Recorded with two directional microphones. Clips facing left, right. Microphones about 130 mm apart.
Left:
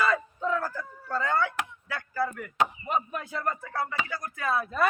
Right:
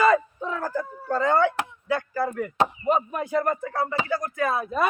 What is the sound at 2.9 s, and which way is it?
Speech, 20° right (ahead or behind).